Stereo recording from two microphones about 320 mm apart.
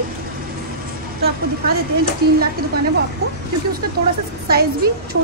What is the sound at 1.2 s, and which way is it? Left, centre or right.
Speech, right.